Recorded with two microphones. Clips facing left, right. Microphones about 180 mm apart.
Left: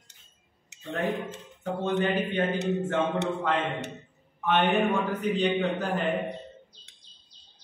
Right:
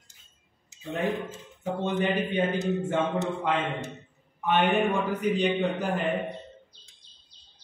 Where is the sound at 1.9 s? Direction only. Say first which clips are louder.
Left 1 dB; centre (ahead or behind).